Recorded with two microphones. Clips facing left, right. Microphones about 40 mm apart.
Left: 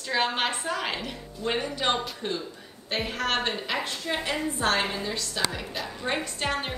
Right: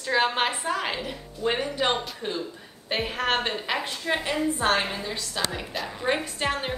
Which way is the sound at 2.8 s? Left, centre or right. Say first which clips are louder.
Right 2 dB; centre.